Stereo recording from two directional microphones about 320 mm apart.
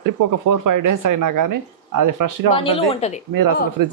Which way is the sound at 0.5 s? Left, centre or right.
Right.